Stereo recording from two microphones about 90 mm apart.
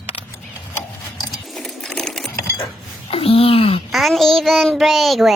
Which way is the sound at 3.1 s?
90° left.